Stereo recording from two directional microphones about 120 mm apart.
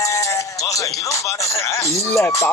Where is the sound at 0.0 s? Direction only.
25° left (ahead or behind).